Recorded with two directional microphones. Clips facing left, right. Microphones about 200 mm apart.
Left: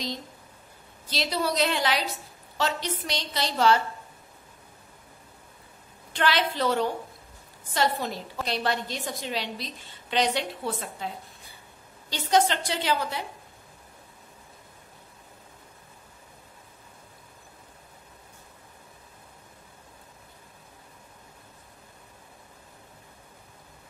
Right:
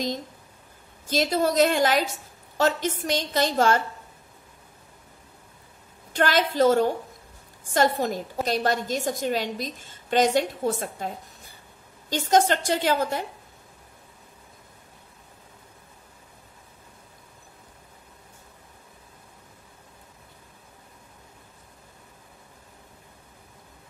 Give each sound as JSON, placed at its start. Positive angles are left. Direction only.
{"t": 1.0, "sound": "a woman's voice", "side_deg": -45}
{"t": 6.1, "sound": "a woman's voice", "side_deg": -45}